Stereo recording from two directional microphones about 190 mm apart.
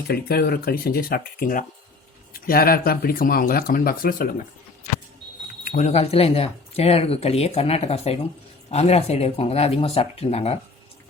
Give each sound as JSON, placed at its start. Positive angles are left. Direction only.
{"t": 0.1, "sound": "speech", "side_deg": 55}
{"t": 5.6, "sound": "speech", "side_deg": 40}